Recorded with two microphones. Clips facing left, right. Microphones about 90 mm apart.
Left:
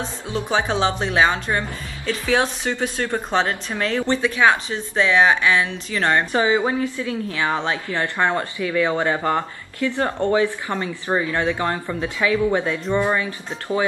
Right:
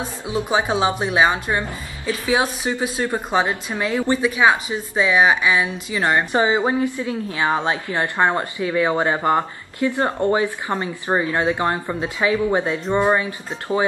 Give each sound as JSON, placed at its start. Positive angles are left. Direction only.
{"t": 0.0, "sound": "a woman's voice", "side_deg": -15}